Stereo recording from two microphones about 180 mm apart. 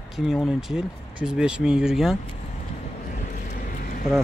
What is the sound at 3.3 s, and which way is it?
Vehicle, 50° left (ahead or behind).